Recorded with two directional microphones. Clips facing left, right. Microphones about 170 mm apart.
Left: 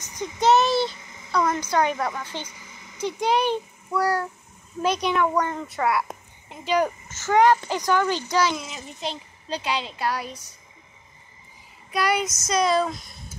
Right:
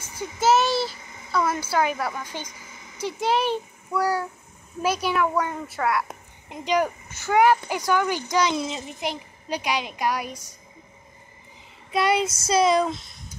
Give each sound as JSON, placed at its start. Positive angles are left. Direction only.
{"t": 0.2, "sound": "a sound", "side_deg": -5}
{"t": 3.0, "sound": "a child's voice", "side_deg": -5}
{"t": 6.5, "sound": "speech", "side_deg": -15}
{"t": 8.5, "sound": "a child's voice", "side_deg": -30}
{"t": 8.8, "sound": "speech", "side_deg": -15}
{"t": 11.9, "sound": "child singing", "side_deg": -25}